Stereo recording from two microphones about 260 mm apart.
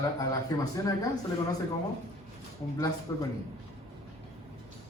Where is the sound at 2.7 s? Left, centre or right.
Centre.